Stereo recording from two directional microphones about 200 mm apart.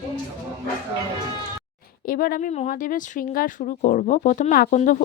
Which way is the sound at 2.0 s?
45° left (ahead or behind).